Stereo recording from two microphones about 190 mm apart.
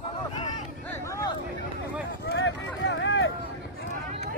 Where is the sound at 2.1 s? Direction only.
65° left (ahead or behind).